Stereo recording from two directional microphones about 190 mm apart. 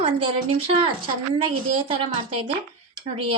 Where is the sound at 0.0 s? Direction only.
30° right (ahead or behind).